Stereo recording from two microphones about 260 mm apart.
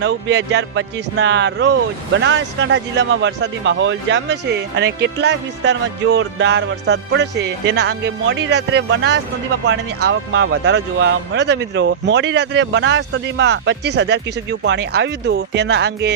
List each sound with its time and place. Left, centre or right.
0.0 s speech: right